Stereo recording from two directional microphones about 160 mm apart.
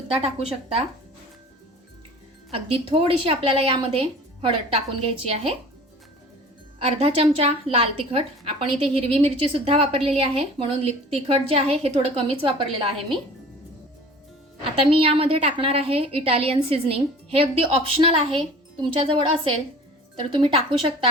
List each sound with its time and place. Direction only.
0.2 s a woman's voice: 40° right (ahead or behind)
2.5 s a woman's voice: 35° right (ahead or behind)
6.7 s a woman's voice: 40° right (ahead or behind)
14.8 s a woman's voice: 35° right (ahead or behind)